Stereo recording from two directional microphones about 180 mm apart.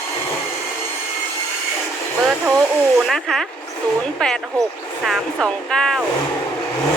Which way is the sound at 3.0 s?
Centre (ahead or behind).